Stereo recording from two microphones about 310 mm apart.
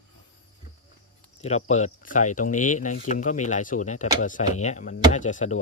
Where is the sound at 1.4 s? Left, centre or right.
Left.